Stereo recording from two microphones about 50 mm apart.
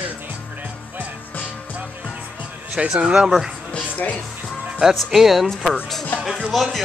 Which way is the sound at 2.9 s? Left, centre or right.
Centre.